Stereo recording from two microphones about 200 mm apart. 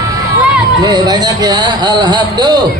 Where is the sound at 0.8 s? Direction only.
20° right (ahead or behind).